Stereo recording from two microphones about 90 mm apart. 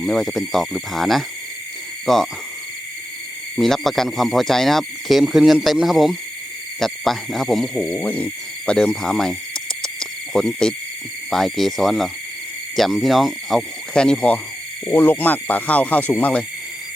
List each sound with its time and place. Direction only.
0.0 s speech: 5° left (ahead or behind)
3.5 s speech: 5° left (ahead or behind)
7.9 s speech: 15° left (ahead or behind)
9.8 s cricket: 5° left (ahead or behind)
11.3 s speech: centre (ahead or behind)
13.9 s speech: 10° left (ahead or behind)
14.8 s speech: 25° left (ahead or behind)